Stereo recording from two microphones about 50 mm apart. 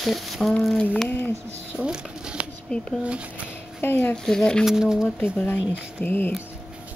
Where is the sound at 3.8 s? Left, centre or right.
Left.